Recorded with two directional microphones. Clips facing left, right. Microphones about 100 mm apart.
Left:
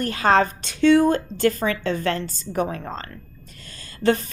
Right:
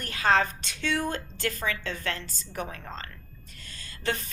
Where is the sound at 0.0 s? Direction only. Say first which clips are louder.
Left 6 dB; 40° left (ahead or behind).